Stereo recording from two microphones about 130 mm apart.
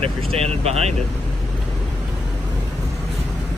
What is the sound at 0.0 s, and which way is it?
Speech, 50° right (ahead or behind).